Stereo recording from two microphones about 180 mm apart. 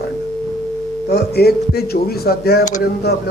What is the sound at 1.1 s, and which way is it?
A man's voice, 65° left (ahead or behind).